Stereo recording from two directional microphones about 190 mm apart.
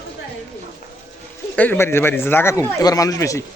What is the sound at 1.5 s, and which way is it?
Speech, 10° left (ahead or behind).